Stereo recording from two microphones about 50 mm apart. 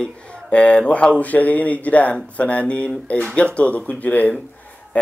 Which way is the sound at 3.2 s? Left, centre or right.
Centre.